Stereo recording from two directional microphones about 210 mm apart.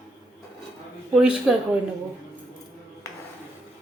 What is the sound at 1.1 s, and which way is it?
Speech, 5° right (ahead or behind).